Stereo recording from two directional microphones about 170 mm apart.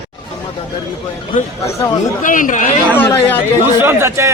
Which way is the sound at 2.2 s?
50° left (ahead or behind).